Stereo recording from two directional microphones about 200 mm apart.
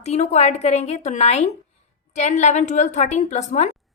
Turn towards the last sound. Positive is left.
turn(degrees=35)  # may be behind; listen again after turning